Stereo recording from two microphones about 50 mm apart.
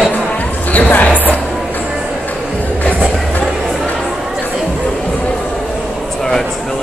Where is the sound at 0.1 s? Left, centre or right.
Left.